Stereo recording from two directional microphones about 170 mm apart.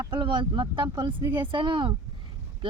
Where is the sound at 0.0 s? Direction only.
25° right (ahead or behind).